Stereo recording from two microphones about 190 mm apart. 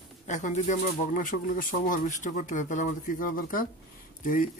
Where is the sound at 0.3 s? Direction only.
40° left (ahead or behind).